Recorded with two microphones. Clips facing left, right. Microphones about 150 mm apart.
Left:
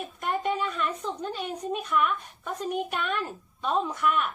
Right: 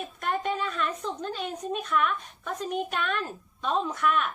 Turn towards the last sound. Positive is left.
turn(degrees=10)  # may be behind; listen again after turning